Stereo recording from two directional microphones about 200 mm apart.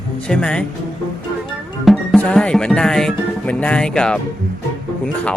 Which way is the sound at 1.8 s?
Centre (ahead or behind).